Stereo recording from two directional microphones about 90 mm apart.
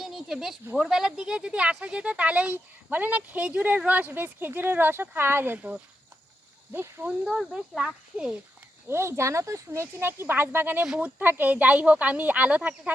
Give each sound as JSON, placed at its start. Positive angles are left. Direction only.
{"t": 0.0, "sound": "a sound", "side_deg": -5}
{"t": 0.8, "sound": "speech", "side_deg": -5}
{"t": 7.3, "sound": "speech", "side_deg": -5}
{"t": 8.9, "sound": "speech", "side_deg": -30}